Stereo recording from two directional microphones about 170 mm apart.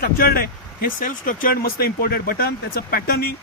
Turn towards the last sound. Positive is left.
turn(degrees=65)  # may be behind; listen again after turning